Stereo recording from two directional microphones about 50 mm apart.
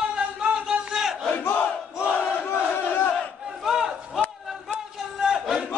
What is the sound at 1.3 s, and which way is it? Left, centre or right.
Crowd, left.